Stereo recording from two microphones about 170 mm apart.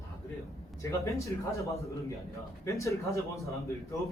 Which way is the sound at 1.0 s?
20° left (ahead or behind).